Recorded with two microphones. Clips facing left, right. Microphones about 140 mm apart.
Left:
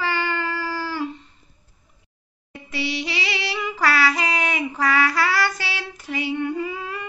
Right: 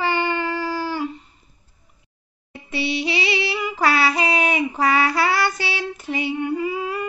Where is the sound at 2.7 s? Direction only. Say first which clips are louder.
Right 4 dB; 20° right (ahead or behind).